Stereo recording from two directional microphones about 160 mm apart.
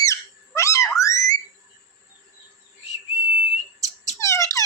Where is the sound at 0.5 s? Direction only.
20° left (ahead or behind).